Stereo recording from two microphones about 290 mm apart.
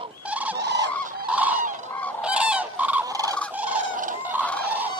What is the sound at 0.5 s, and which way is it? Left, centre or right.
Fowl, right.